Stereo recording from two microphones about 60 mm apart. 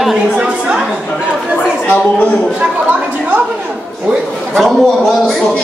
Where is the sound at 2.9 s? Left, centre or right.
Right.